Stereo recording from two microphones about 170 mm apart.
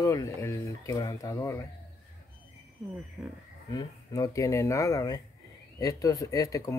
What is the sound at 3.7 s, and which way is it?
Speech, 20° left (ahead or behind).